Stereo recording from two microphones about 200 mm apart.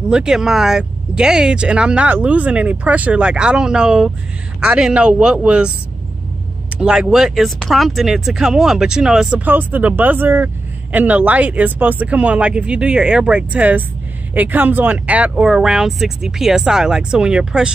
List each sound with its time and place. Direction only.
0.1 s speech: 5° right (ahead or behind)
6.8 s speech: 5° right (ahead or behind)